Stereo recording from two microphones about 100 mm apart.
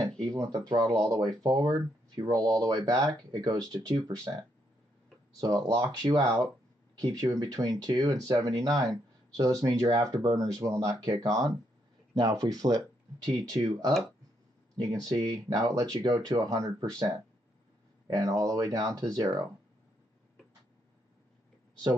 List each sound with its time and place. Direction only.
0.2 s speech: 35° right (ahead or behind)
5.6 s speech: 45° right (ahead or behind)
15.0 s speech: 45° right (ahead or behind)